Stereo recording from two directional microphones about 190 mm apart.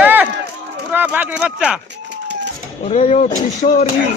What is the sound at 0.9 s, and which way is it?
Speech, 10° right (ahead or behind).